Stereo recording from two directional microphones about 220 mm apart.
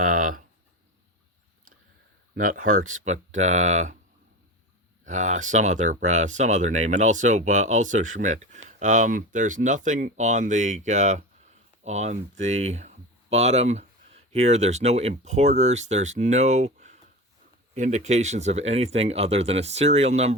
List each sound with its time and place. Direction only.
0.0 s a sound: 35° right (ahead or behind)
2.3 s speech: 40° right (ahead or behind)
5.0 s speech: 35° right (ahead or behind)